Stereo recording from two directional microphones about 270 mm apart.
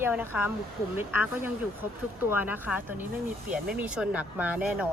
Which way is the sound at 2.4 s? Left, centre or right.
Centre.